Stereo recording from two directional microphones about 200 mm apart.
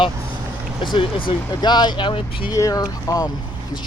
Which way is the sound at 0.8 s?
25° left (ahead or behind).